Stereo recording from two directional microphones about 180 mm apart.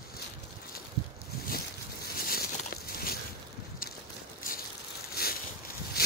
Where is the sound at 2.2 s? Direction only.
55° left (ahead or behind).